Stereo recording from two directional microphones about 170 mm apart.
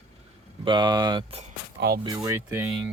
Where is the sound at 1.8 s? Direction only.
65° right (ahead or behind).